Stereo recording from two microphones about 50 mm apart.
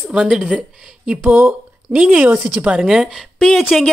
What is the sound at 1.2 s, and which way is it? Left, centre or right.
Speech, right.